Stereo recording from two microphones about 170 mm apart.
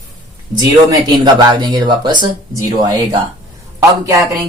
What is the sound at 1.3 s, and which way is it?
Speech, 25° right (ahead or behind).